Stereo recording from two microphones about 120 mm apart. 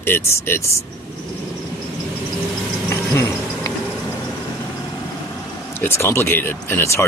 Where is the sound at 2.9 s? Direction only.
25° left (ahead or behind).